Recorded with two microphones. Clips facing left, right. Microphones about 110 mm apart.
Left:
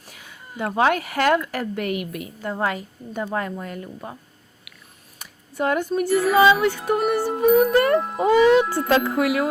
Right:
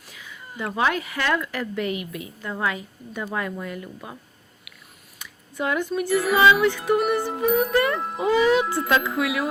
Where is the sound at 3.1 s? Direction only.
30° left (ahead or behind).